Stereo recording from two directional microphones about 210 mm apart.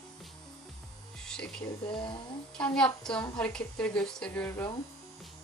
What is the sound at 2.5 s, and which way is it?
A woman's voice, 5° left (ahead or behind).